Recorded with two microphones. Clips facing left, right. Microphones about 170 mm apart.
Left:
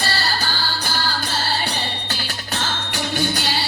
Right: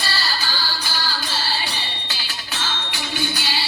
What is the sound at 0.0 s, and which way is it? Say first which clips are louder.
Music: left 3 dB; 55° left (ahead or behind).